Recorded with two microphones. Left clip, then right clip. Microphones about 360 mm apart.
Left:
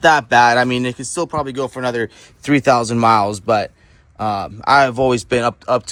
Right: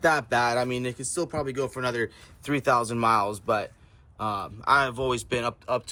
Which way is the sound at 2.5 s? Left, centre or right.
Left.